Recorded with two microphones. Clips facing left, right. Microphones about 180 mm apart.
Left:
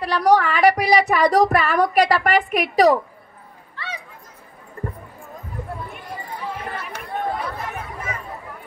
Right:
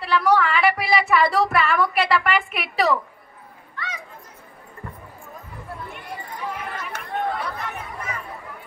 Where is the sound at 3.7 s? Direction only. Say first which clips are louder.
Left 1 dB; 30° left (ahead or behind).